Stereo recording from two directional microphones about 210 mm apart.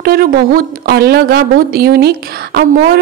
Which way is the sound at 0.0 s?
45° right (ahead or behind).